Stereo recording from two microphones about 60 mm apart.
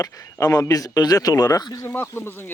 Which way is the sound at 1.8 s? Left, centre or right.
Left.